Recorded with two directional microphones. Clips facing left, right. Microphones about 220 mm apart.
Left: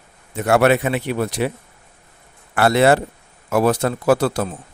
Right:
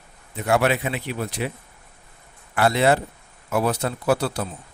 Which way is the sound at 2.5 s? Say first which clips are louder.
Left 4 dB; 75° left (ahead or behind).